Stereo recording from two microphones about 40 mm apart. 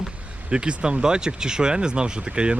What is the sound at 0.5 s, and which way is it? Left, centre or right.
Speech, right.